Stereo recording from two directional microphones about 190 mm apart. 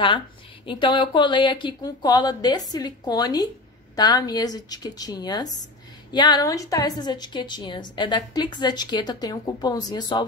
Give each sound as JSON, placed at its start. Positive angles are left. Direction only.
{"t": 0.7, "sound": "a woman's voice", "side_deg": 25}